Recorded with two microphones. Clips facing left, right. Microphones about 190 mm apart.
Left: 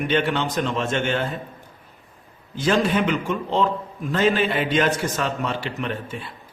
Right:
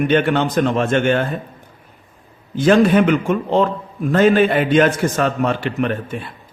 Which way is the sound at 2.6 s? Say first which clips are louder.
Right 8 dB; 55° right (ahead or behind).